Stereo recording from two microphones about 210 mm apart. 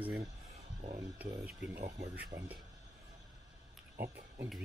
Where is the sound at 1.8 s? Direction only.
35° right (ahead or behind).